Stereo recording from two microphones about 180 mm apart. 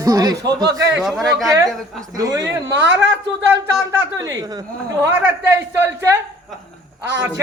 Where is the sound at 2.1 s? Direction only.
20° right (ahead or behind).